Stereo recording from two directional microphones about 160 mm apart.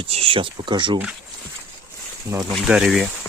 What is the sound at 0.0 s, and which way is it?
Speech, 35° right (ahead or behind).